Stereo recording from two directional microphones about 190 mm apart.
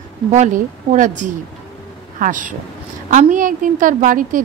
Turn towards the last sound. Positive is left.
turn(degrees=-45)  # may be behind; listen again after turning